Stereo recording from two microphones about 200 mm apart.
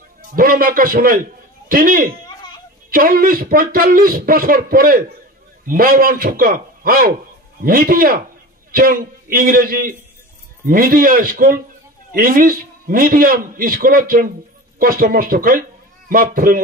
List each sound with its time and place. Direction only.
0.2 s a man's voice: 45° right (ahead or behind)